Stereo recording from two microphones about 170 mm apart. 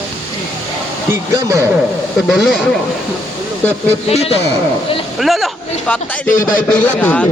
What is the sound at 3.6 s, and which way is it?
Speech, 10° left (ahead or behind).